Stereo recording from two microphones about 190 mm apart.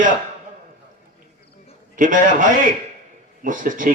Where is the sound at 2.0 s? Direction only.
45° right (ahead or behind).